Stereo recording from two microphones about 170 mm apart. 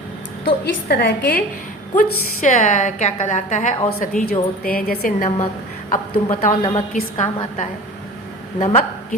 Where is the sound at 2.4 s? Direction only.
50° left (ahead or behind).